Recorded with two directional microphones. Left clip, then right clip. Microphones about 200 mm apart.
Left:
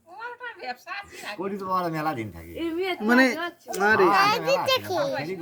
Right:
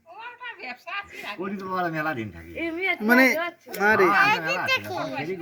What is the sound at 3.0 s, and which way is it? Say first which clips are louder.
Speech: right 2 dB; centre (ahead or behind).